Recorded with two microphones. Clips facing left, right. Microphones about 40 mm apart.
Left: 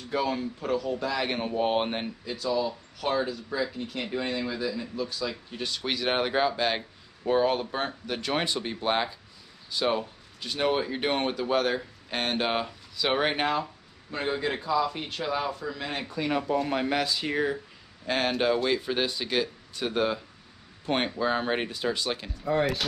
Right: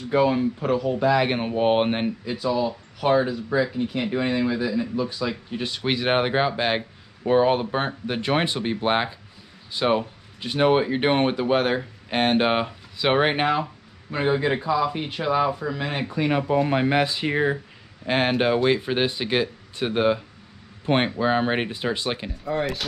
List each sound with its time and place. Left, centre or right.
0.1 s speech: right
22.4 s speech: centre